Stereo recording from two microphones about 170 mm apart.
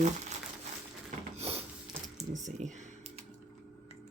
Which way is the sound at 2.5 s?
45° right (ahead or behind).